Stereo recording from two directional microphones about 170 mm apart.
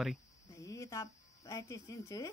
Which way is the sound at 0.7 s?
20° left (ahead or behind).